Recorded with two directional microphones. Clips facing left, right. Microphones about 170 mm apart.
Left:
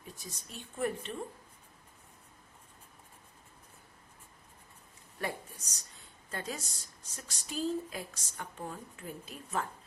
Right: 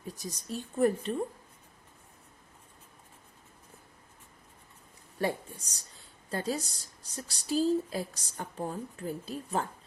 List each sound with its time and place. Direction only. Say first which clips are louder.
0.2 s speech: right 9 dB; 40° right (ahead or behind)
5.2 s speech: right 7 dB; 30° right (ahead or behind)